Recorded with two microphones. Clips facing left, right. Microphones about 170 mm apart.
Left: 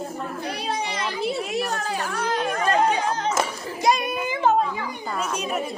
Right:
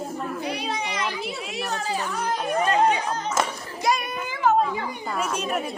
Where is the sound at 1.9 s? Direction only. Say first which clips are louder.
Left 1 dB; 65° left (ahead or behind).